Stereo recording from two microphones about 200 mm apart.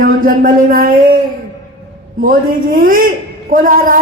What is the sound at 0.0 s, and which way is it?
Speech, 45° right (ahead or behind).